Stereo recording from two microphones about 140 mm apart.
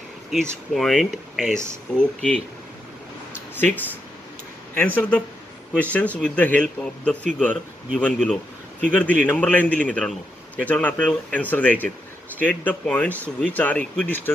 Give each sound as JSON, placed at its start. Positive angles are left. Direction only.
{"t": 0.3, "sound": "a man's voice", "side_deg": 0}
{"t": 3.5, "sound": "a man's voice", "side_deg": 15}